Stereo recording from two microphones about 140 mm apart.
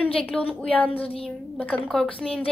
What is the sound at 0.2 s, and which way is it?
A woman's voice, 10° left (ahead or behind).